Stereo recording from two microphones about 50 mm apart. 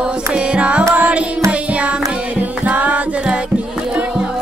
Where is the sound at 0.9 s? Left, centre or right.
Right.